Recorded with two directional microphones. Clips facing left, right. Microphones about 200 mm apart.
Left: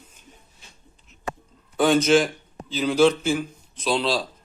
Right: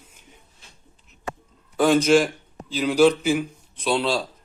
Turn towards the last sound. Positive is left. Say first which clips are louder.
# right 1 dB
turn(degrees=-5)  # may be behind; listen again after turning